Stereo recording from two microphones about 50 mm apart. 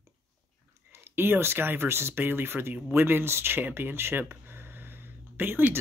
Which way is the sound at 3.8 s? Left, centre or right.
Right.